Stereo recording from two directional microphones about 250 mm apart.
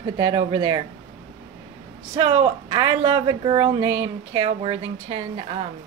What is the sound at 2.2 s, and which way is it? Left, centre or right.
Speech, centre.